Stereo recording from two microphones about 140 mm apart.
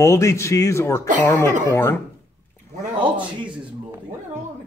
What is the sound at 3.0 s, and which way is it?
Speech, 35° right (ahead or behind).